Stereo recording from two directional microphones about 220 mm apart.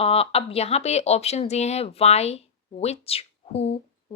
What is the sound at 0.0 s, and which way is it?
Speech, 25° left (ahead or behind).